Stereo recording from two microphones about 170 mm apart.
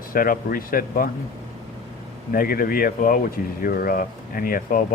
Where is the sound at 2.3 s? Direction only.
55° left (ahead or behind).